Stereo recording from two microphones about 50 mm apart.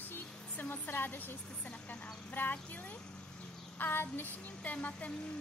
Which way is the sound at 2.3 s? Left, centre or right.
Left.